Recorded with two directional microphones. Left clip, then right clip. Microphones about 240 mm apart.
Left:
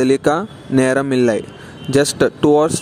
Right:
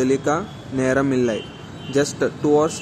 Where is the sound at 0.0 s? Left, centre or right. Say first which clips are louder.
Left 5 dB; left.